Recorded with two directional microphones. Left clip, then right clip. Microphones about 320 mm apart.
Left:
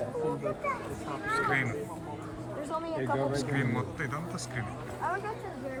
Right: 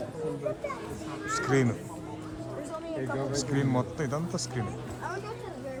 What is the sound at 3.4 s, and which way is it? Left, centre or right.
A man's voice, centre.